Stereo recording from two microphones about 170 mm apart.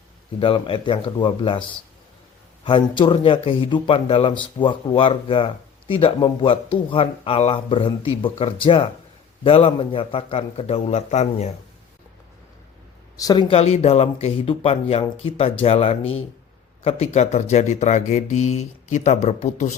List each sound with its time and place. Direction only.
0.3 s a man's voice: 30° left (ahead or behind)
13.1 s speech: 25° left (ahead or behind)
13.6 s a man's voice: 35° left (ahead or behind)